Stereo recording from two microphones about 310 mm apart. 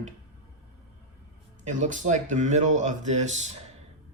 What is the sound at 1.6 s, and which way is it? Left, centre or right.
Speech, right.